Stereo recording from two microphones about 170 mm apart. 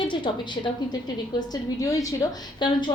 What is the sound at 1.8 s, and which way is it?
Speech, 20° left (ahead or behind).